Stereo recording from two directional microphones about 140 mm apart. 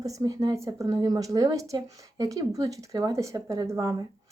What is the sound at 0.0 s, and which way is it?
A woman's voice, 25° right (ahead or behind).